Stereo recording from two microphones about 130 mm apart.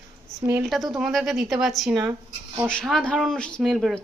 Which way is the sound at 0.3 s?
20° right (ahead or behind).